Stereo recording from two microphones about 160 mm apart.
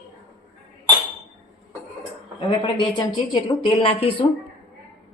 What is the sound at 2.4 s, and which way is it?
A woman's voice, 30° left (ahead or behind).